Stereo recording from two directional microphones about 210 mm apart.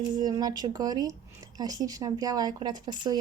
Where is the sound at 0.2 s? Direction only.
20° right (ahead or behind).